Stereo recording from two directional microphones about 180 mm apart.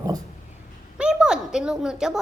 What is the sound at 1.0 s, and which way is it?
A woman's voice, 5° right (ahead or behind).